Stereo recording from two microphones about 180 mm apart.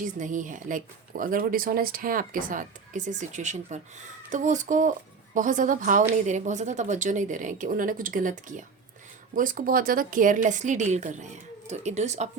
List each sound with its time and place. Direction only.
0.0 s speech: 45° right (ahead or behind)